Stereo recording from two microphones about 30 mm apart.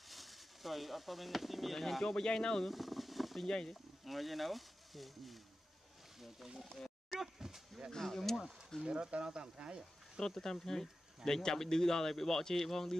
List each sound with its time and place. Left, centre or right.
0.1 s speech: centre
2.0 s speech: left
2.7 s boat: centre
3.4 s speech: left
3.7 s speech: centre
7.2 s a sound: centre
7.9 s speech: centre
8.8 s speech: right
10.2 s speech: centre